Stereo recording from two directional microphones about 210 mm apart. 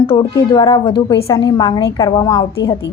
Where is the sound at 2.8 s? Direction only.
60° left (ahead or behind).